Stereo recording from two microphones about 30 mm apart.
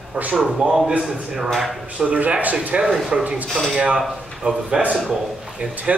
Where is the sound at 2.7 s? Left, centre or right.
Right.